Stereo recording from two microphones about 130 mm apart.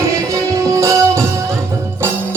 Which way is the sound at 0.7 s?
20° right (ahead or behind).